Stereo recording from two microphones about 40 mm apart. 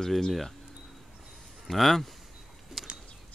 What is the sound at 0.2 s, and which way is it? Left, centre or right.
Speech, centre.